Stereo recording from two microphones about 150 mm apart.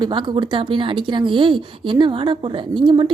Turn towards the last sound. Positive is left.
turn(degrees=-35)  # may be behind; listen again after turning